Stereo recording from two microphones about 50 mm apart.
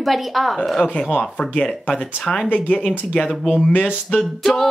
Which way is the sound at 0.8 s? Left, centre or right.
Left.